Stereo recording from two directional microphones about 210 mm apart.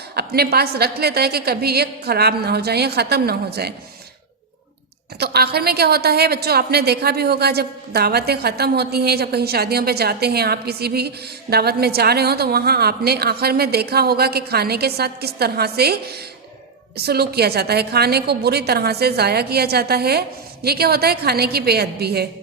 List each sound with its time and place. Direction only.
0.2 s a woman's voice: 50° right (ahead or behind)
5.2 s a woman's voice: 50° right (ahead or behind)